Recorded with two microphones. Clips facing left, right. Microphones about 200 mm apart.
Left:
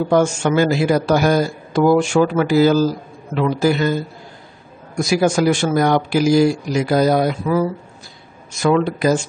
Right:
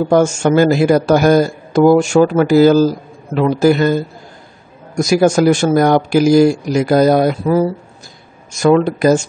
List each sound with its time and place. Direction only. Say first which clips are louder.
0.1 s speech: right 4 dB; 45° right (ahead or behind)
8.6 s speech: right 5 dB; 45° right (ahead or behind)